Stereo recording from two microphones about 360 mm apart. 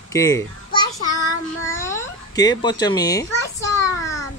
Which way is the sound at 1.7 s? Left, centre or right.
Centre.